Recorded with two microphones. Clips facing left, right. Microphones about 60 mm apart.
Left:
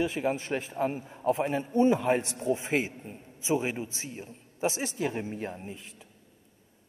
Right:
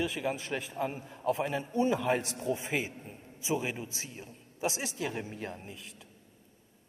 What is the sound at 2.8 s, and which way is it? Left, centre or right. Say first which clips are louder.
Speech: left 4 dB; centre.